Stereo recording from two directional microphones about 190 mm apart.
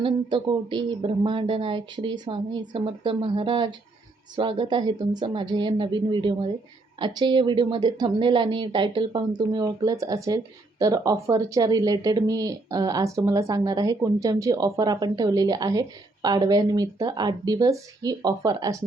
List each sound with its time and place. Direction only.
0.0 s speech: 25° right (ahead or behind)